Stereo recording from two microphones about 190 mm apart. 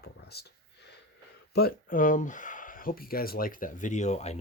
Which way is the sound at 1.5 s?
50° left (ahead or behind).